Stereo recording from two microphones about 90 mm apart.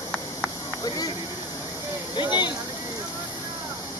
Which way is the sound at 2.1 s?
60° left (ahead or behind).